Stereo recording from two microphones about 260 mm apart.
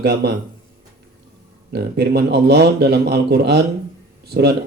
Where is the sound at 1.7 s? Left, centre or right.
Right.